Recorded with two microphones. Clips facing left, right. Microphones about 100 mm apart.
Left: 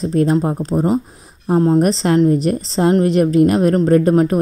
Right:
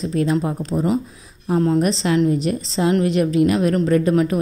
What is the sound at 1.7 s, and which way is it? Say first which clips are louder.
A woman's voice: left 4 dB; 45° left (ahead or behind).